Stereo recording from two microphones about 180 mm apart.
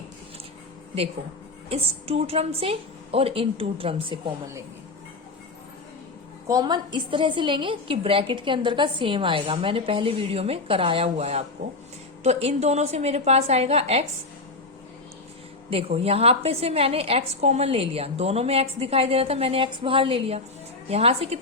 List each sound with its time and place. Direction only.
1.7 s a woman's voice: 35° right (ahead or behind)
6.5 s a woman's voice: 20° right (ahead or behind)
15.7 s a woman's voice: 35° right (ahead or behind)